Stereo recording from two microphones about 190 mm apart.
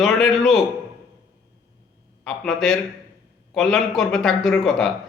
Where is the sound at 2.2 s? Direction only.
Centre (ahead or behind).